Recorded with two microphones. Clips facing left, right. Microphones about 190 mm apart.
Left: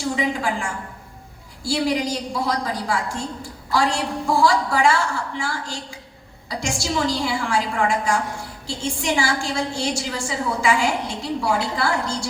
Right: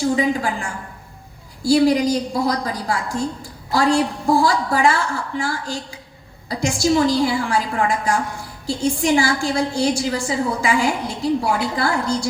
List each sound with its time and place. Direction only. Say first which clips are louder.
0.2 s a woman's voice: right 3 dB; 40° right (ahead or behind)
6.9 s a woman's voice: right 5 dB; 40° right (ahead or behind)